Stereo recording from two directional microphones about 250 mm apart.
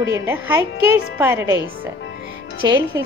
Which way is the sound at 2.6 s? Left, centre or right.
Centre.